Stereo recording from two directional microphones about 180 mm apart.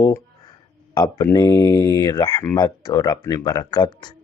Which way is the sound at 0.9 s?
20° left (ahead or behind).